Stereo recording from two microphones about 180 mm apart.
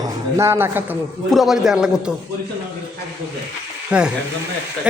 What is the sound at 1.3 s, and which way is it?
Speech, centre (ahead or behind).